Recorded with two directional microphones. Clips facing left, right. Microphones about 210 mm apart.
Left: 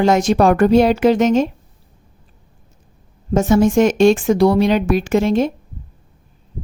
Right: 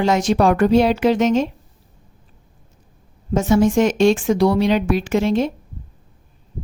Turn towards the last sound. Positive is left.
turn(degrees=45)  # may be behind; listen again after turning